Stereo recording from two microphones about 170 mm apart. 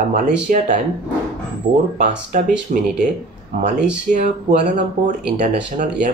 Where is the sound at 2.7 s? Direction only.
45° right (ahead or behind).